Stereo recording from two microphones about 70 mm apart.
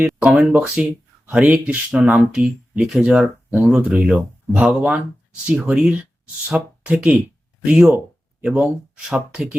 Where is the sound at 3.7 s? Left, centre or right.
Centre.